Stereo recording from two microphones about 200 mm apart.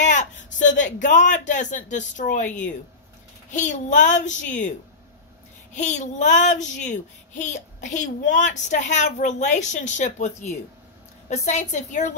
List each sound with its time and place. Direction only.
0.0 s speech: 40° left (ahead or behind)
5.8 s speech: 35° left (ahead or behind)